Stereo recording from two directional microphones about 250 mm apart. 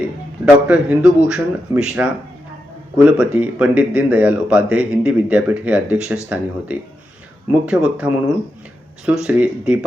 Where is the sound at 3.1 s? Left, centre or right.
Centre.